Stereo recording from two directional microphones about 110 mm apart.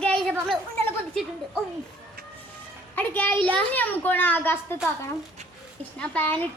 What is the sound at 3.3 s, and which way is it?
Speech, 50° right (ahead or behind).